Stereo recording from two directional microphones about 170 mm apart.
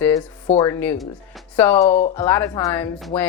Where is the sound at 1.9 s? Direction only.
40° left (ahead or behind).